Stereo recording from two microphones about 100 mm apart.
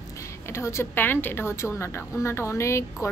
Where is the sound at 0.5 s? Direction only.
25° left (ahead or behind).